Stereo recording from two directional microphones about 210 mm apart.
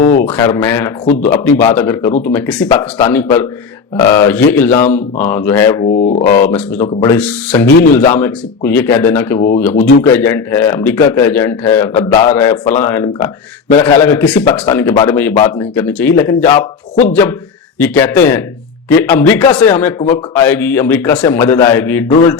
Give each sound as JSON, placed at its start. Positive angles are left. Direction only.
{"t": 0.3, "sound": "speech", "side_deg": 15}
{"t": 5.9, "sound": "speech", "side_deg": 35}
{"t": 6.5, "sound": "speech", "side_deg": 10}
{"t": 17.7, "sound": "speech", "side_deg": 10}